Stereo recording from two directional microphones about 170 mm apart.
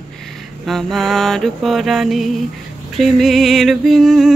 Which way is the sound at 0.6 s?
Centre (ahead or behind).